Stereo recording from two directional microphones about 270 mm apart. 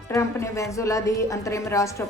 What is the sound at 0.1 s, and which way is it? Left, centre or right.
Speech, centre.